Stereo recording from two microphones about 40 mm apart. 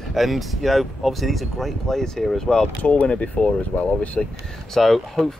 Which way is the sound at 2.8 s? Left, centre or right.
Left.